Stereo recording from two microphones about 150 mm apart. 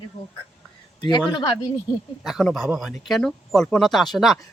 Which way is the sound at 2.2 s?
Centre (ahead or behind).